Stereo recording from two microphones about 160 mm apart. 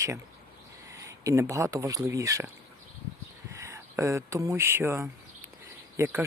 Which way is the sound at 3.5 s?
20° right (ahead or behind).